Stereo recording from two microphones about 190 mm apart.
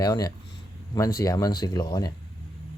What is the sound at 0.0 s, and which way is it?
Speech, 20° left (ahead or behind).